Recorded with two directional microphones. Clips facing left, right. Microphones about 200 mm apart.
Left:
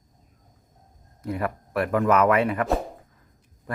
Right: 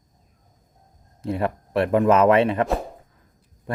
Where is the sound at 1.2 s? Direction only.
25° right (ahead or behind).